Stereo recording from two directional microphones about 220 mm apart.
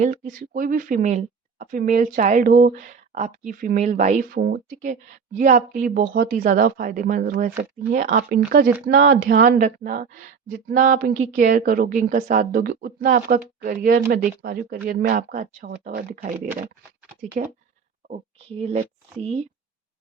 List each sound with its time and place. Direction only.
0.0 s a woman's voice: 35° right (ahead or behind)
17.4 s a woman's voice: 35° right (ahead or behind)